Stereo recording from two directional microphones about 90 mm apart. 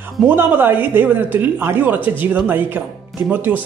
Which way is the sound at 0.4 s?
25° right (ahead or behind).